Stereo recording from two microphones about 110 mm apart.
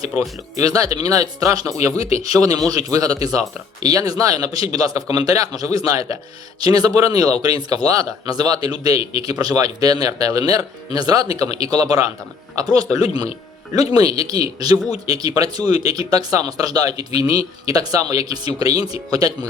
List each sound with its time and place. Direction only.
0.6 s speech: 30° right (ahead or behind)